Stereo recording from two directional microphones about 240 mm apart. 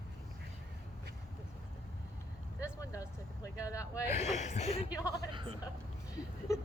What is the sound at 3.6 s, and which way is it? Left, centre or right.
Speech, centre.